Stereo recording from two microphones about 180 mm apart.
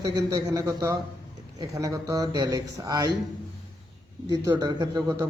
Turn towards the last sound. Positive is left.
turn(degrees=-20)  # may be behind; listen again after turning